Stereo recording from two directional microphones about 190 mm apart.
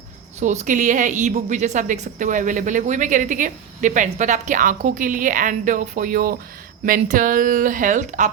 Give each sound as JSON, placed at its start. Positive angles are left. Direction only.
{"t": 0.3, "sound": "a woman's voice", "side_deg": -40}